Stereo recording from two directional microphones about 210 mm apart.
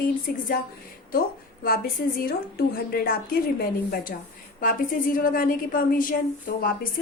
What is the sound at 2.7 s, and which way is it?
A woman's voice, 45° left (ahead or behind).